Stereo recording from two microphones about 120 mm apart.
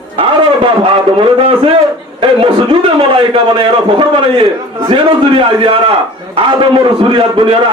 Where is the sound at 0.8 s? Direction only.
45° right (ahead or behind).